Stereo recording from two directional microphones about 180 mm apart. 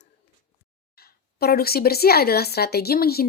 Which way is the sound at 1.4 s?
60° left (ahead or behind).